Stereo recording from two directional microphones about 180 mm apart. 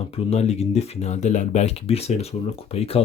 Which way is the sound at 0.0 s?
35° left (ahead or behind).